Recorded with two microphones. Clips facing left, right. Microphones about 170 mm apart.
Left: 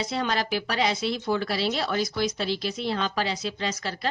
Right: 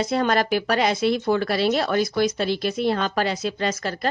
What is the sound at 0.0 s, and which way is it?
A woman's voice, 50° right (ahead or behind).